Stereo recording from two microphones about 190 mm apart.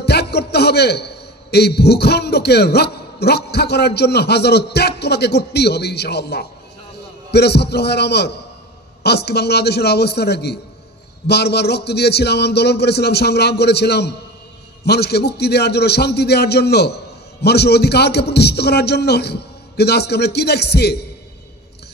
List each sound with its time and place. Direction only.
0.0 s a man's voice: 60° left (ahead or behind)